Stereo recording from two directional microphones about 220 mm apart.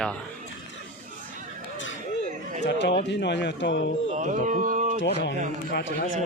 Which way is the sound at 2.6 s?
50° left (ahead or behind).